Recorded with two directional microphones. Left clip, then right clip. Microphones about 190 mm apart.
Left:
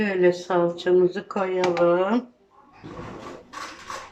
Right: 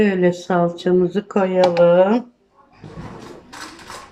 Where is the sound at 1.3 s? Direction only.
45° right (ahead or behind).